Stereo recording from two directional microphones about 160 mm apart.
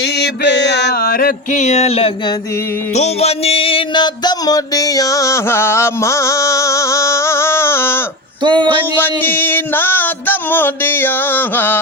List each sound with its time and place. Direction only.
0.0 s mantra: 90° left; by 1.3 s 70° left (ahead or behind)
1.5 s a sound: 45° left (ahead or behind)
2.9 s music: 40° left (ahead or behind); by 8.0 s 15° left (ahead or behind)
8.4 s speech: 30° right (ahead or behind)
9.0 s music: 15° left (ahead or behind)